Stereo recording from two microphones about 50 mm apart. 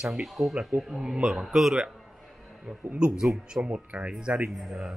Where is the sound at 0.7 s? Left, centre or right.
Right.